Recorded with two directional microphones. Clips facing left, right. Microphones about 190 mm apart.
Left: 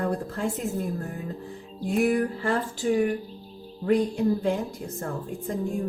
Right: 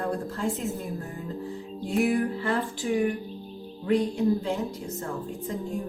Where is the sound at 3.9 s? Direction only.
50° left (ahead or behind).